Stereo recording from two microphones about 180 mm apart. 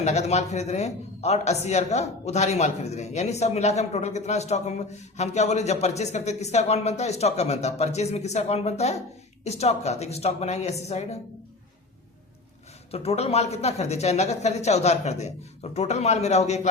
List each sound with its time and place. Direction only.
0.0 s speech: 40° left (ahead or behind)
12.9 s speech: 35° left (ahead or behind)